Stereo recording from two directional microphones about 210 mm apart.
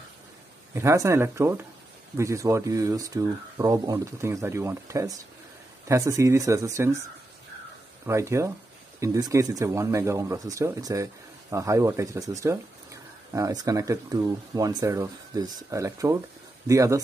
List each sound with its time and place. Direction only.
0.7 s speech: 15° right (ahead or behind)
8.1 s speech: 15° right (ahead or behind)